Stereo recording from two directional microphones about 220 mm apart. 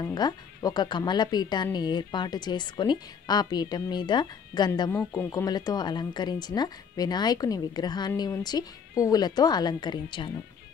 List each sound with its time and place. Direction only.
0.0 s speech: 20° left (ahead or behind)